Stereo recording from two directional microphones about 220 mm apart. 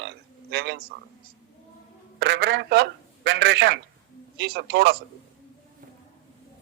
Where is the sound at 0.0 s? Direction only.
50° right (ahead or behind).